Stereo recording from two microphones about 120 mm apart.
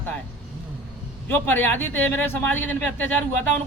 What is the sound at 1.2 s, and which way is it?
Speech, 15° left (ahead or behind).